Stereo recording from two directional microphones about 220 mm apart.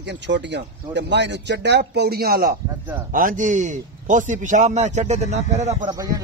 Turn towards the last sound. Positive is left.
turn(degrees=-30)  # may be behind; listen again after turning